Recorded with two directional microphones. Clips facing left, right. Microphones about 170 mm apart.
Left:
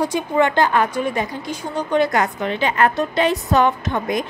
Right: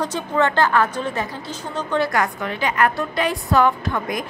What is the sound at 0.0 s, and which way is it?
A woman's voice, 10° left (ahead or behind).